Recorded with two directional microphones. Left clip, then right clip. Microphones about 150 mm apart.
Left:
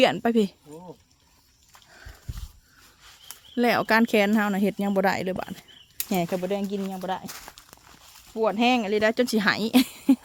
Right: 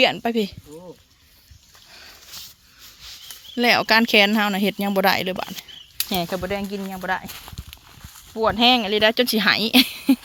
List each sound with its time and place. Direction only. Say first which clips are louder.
0.0 s speech: right 2 dB; 45° left (ahead or behind)
1.9 s horse: right 8 dB; 25° left (ahead or behind)
3.0 s speech: right 8 dB; 25° left (ahead or behind)
6.2 s speech: right 2 dB; 25° left (ahead or behind)
6.6 s speech: right 1 dB; 15° right (ahead or behind)
6.9 s speech: right 5 dB; 20° left (ahead or behind)
7.3 s speech: right 3 dB; 20° right (ahead or behind)
8.1 s speech: right 4 dB; 5° left (ahead or behind)